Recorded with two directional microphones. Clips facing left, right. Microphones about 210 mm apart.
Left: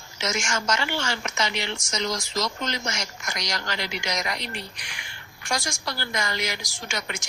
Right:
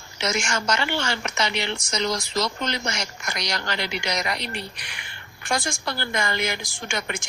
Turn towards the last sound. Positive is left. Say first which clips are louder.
# right 3 dB
turn(degrees=-55)  # may be behind; listen again after turning